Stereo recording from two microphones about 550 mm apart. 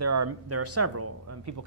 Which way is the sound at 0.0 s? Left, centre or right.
Right.